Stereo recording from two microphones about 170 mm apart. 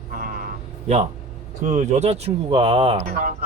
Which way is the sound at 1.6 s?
45° right (ahead or behind).